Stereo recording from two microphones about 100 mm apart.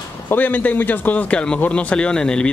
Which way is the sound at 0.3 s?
15° left (ahead or behind).